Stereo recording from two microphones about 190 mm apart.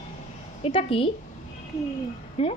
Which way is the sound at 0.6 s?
30° left (ahead or behind).